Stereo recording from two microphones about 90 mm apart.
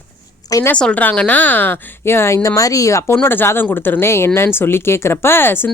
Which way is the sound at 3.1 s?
25° left (ahead or behind).